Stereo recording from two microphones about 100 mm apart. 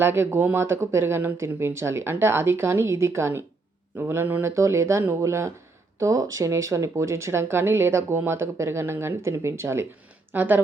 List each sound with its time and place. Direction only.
0.0 s speech: 25° right (ahead or behind)